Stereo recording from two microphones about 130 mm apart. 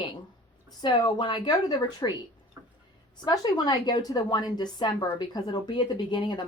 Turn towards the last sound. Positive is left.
turn(degrees=35)  # may be behind; listen again after turning